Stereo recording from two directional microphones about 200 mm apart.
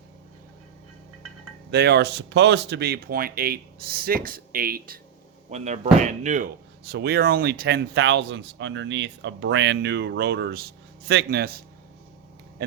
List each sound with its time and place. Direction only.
1.7 s speech: 55° right (ahead or behind)
5.5 s speech: 35° right (ahead or behind)
6.8 s speech: 50° right (ahead or behind)